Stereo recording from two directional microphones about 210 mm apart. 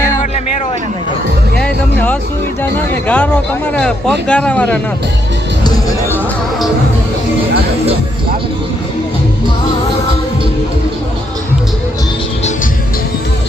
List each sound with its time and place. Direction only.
1.5 s music: 5° left (ahead or behind)
2.7 s speech: 5° left (ahead or behind)
5.6 s speech: 20° left (ahead or behind)